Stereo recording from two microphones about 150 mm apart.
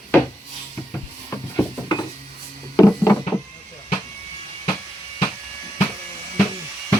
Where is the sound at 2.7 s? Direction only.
20° left (ahead or behind).